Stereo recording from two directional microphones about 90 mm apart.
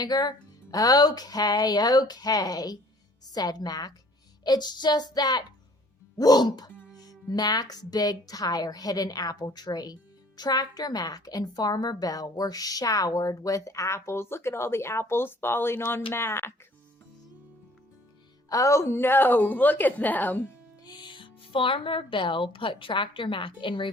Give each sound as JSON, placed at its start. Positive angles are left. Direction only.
{"t": 0.0, "sound": "a woman's voice", "side_deg": 50}
{"t": 18.4, "sound": "a woman's voice", "side_deg": 35}
{"t": 20.8, "sound": "speech", "side_deg": 55}